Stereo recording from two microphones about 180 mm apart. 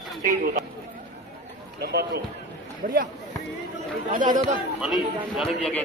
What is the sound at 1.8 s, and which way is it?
Speech, 65° right (ahead or behind).